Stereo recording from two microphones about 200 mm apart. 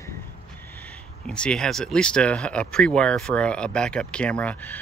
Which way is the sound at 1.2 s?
5° left (ahead or behind).